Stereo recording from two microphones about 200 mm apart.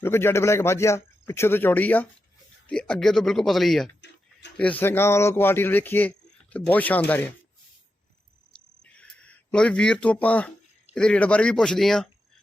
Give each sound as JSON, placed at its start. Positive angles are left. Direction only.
{"t": 0.0, "sound": "speech", "side_deg": 10}
{"t": 4.0, "sound": "tick-tock", "side_deg": 60}
{"t": 4.5, "sound": "speech", "side_deg": 5}
{"t": 8.8, "sound": "a sound", "side_deg": 5}
{"t": 10.9, "sound": "speech", "side_deg": 5}